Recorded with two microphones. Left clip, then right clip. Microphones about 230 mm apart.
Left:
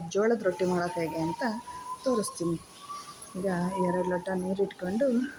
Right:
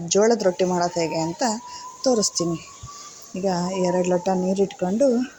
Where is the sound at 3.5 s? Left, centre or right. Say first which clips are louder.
Right 7 dB; right.